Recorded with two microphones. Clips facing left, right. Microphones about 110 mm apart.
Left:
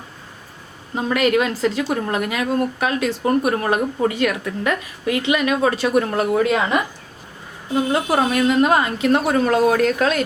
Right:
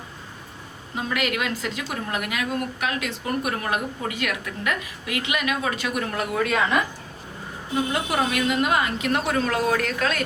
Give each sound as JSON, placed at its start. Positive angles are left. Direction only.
{"t": 0.9, "sound": "a woman's voice", "side_deg": 35}
{"t": 8.1, "sound": "a woman's voice", "side_deg": 35}